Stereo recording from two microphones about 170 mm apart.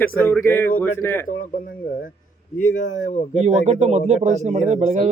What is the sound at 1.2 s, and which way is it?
Speech, 50° left (ahead or behind).